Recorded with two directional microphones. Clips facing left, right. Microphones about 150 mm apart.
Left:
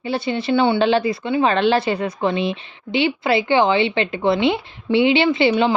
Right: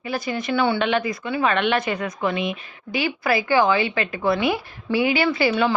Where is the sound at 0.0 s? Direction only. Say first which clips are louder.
Left 4 dB; 30° left (ahead or behind).